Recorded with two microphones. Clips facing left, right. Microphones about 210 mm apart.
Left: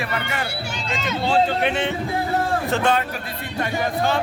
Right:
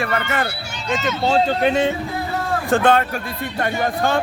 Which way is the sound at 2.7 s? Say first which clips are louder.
Right 7 dB; 55° right (ahead or behind).